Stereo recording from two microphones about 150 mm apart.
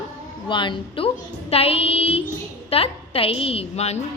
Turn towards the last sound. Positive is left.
turn(degrees=45)  # may be behind; listen again after turning